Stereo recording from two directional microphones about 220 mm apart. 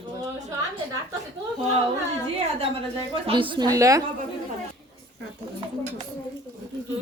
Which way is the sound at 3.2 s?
20° right (ahead or behind).